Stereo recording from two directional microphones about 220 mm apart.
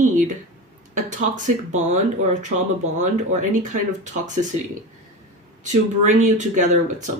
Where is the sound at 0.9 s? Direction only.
35° right (ahead or behind).